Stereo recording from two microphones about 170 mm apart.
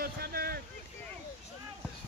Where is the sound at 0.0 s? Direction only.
60° right (ahead or behind).